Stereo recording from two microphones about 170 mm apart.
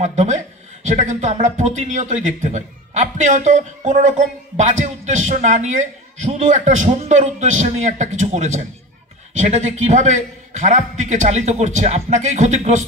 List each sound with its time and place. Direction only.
0.0 s a man's voice: 45° right (ahead or behind)